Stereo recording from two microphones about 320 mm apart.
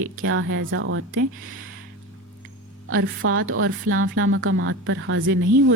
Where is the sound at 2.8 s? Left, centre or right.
Right.